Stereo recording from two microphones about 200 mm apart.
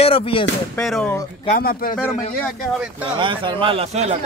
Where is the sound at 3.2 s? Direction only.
25° right (ahead or behind).